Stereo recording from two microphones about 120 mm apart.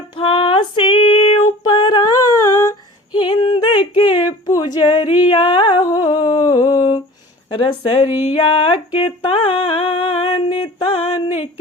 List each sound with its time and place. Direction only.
0.2 s female singing: 45° left (ahead or behind); by 2.7 s 25° left (ahead or behind)
3.1 s yodeling: 45° left (ahead or behind)
4.4 s singing: 30° left (ahead or behind)
4.9 s a sound: 50° left (ahead or behind)
5.8 s humming: 30° left (ahead or behind)
7.5 s speech: 50° left (ahead or behind)
8.2 s a sound: 50° left (ahead or behind)